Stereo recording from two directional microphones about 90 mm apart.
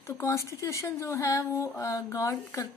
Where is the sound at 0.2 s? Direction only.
35° left (ahead or behind).